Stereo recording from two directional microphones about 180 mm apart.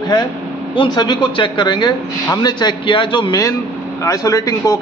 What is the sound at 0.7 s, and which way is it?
A man's voice, 25° left (ahead or behind).